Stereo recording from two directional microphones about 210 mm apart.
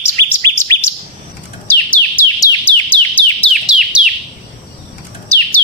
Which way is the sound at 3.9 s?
5° right (ahead or behind).